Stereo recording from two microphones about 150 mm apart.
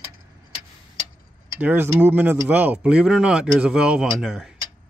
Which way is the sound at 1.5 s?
15° right (ahead or behind).